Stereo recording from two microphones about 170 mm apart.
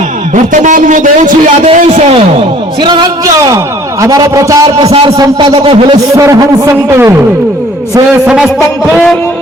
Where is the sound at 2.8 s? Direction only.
25° right (ahead or behind).